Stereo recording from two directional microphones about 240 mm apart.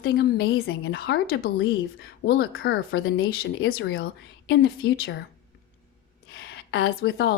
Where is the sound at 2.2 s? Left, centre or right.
Left.